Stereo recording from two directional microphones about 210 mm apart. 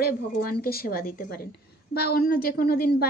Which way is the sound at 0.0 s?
45° left (ahead or behind).